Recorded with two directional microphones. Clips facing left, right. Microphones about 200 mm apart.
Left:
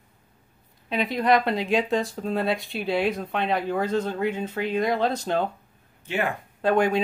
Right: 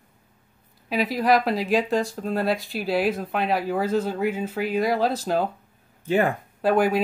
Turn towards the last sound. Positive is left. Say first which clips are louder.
# right 1 dB
turn(degrees=-5)  # may be behind; listen again after turning